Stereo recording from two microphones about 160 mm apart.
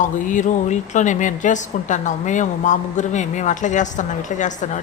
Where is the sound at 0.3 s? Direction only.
50° left (ahead or behind).